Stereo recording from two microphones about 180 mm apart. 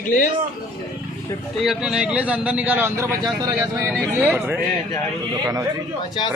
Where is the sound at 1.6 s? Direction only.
5° right (ahead or behind); by 5.6 s 20° right (ahead or behind).